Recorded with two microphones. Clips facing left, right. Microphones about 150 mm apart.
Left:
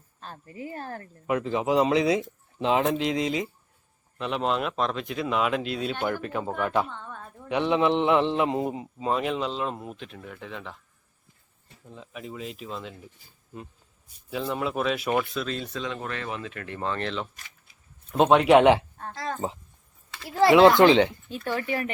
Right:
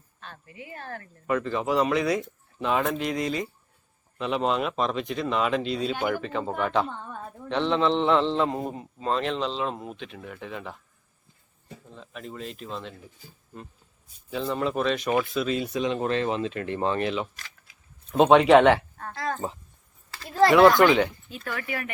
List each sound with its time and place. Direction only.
0.2 s speech: 35° left (ahead or behind)
1.3 s speech: 15° left (ahead or behind)
4.2 s speech: centre (ahead or behind)
6.2 s a man's voice: 5° left (ahead or behind)
11.9 s speech: 10° left (ahead or behind)
14.3 s speech: 5° left (ahead or behind); by 17.2 s 10° right (ahead or behind)
17.3 s a sound: 90° right
18.1 s speech: centre (ahead or behind); by 21.9 s 30° left (ahead or behind)